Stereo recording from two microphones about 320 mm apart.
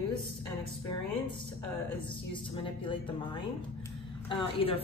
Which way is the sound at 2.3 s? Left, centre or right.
Centre.